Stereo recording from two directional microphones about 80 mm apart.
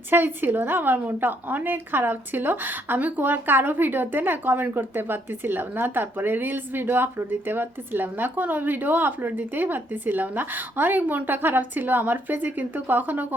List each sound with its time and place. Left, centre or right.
0.1 s a woman's voice: right